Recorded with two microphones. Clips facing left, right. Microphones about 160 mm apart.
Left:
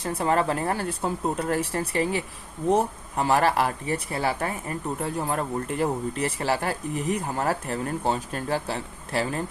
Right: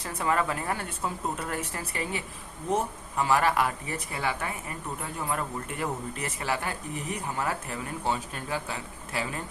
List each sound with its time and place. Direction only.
0.0 s speech: 30° left (ahead or behind)